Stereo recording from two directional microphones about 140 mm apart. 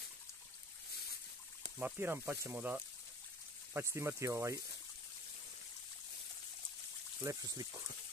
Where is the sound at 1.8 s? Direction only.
15° right (ahead or behind).